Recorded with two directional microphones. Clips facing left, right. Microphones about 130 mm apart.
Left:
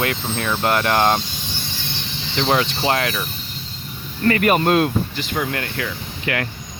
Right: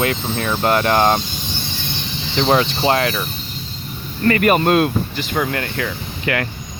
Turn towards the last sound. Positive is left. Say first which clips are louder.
# right 3 dB
turn(degrees=-45)  # may be behind; listen again after turning